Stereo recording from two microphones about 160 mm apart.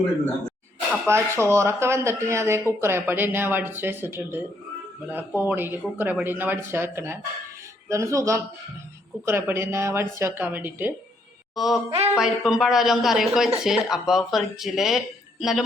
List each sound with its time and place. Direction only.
1.0 s a woman's voice: 15° right (ahead or behind)
11.5 s speech: centre (ahead or behind)
11.9 s speech: 40° right (ahead or behind)
12.1 s speech: 5° right (ahead or behind)